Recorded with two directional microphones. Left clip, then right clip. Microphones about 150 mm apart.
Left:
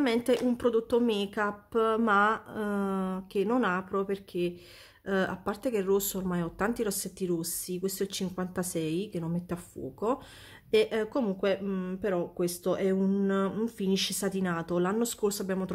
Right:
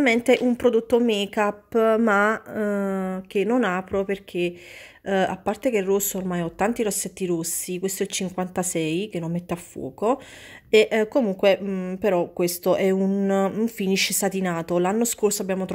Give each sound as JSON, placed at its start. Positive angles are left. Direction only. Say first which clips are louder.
{"t": 0.0, "sound": "speech", "louder": "right 8 dB", "side_deg": -20}
{"t": 8.8, "sound": "a woman's voice", "louder": "right 7 dB", "side_deg": 35}
{"t": 9.1, "sound": "speech", "louder": "right 7 dB", "side_deg": -15}